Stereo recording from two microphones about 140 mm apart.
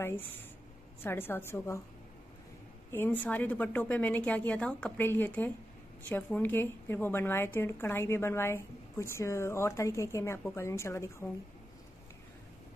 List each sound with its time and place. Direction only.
1.0 s a woman's voice: 15° left (ahead or behind)
2.9 s a woman's voice: 15° left (ahead or behind)